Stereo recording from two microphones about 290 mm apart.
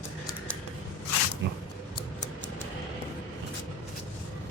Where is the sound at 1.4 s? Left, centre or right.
Right.